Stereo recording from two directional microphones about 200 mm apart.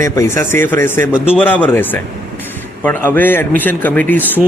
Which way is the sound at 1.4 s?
10° left (ahead or behind).